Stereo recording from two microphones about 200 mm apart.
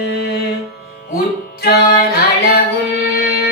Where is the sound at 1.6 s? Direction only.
50° left (ahead or behind).